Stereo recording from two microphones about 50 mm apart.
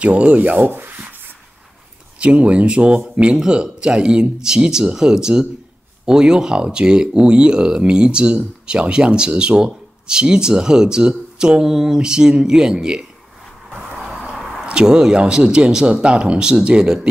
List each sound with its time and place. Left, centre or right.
0.0 s speech: right
0.6 s rub: right
2.1 s speech: right
13.7 s vehicle: centre
14.3 s a sound: centre
14.7 s speech: centre